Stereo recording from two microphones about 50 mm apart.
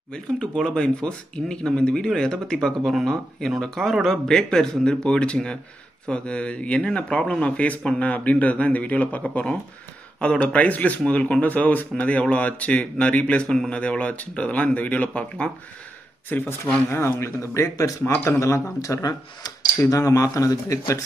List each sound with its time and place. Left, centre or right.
0.1 s speech: centre
16.3 s speech: left
16.9 s speech: left
18.4 s speech: left